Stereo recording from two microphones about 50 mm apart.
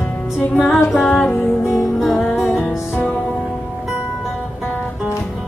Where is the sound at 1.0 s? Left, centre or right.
Left.